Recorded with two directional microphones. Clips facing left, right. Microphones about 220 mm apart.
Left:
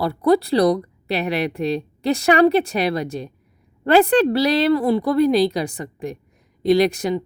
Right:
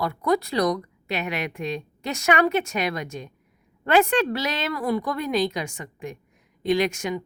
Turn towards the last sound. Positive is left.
turn(degrees=35)  # may be behind; listen again after turning